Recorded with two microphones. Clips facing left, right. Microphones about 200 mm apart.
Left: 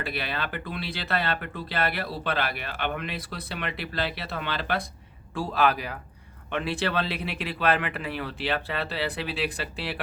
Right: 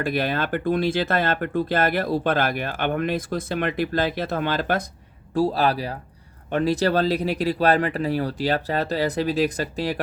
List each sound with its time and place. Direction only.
0.0 s speech: 45° right (ahead or behind)